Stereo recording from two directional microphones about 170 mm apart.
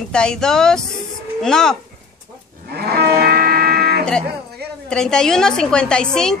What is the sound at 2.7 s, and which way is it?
Cattle, 70° right (ahead or behind).